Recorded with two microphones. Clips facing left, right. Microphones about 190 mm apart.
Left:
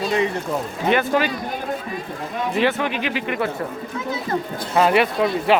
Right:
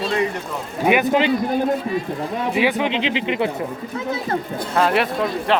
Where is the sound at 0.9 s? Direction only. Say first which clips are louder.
Right 2 dB; 15° right (ahead or behind).